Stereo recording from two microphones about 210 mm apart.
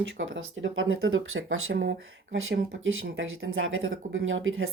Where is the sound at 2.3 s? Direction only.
65° right (ahead or behind).